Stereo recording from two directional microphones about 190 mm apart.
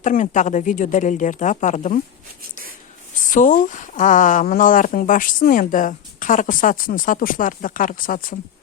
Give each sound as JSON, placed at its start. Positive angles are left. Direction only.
{"t": 0.0, "sound": "speech", "side_deg": 40}
{"t": 3.2, "sound": "speech", "side_deg": 45}